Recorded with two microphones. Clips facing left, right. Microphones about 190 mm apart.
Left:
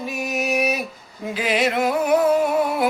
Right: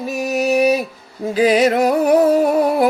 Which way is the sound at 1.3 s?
40° right (ahead or behind).